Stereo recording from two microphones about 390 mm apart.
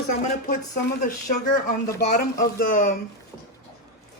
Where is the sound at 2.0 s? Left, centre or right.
Centre.